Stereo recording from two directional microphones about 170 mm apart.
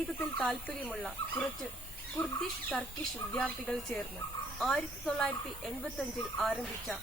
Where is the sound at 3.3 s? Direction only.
5° left (ahead or behind).